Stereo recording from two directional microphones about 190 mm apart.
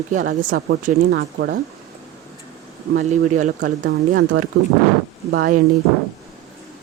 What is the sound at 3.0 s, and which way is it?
Speech, 40° right (ahead or behind).